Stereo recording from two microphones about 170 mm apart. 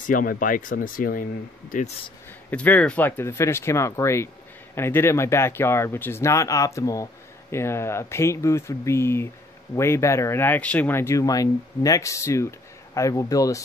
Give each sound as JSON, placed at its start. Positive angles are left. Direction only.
{"t": 0.0, "sound": "speech", "side_deg": 55}
{"t": 2.5, "sound": "speech", "side_deg": 10}